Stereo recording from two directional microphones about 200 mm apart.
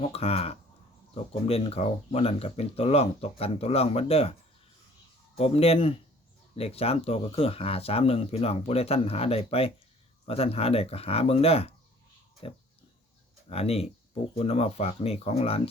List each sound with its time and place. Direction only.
0.0 s speech: 30° left (ahead or behind)
5.4 s speech: 30° left (ahead or behind)